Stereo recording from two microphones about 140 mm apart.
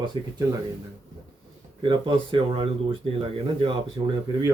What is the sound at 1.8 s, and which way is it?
Speech, 35° right (ahead or behind).